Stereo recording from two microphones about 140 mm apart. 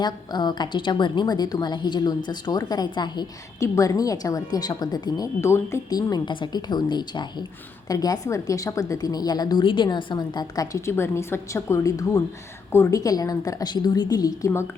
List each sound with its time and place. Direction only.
0.0 s a woman's voice: 30° left (ahead or behind)